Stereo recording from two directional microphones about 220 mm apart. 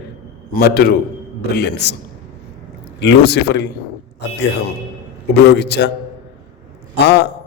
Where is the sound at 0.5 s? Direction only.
45° left (ahead or behind).